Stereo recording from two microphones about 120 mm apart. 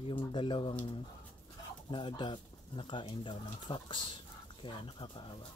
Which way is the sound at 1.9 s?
40° left (ahead or behind).